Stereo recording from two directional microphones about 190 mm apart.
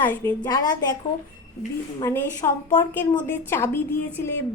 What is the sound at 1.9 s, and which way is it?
Speech, 15° left (ahead or behind).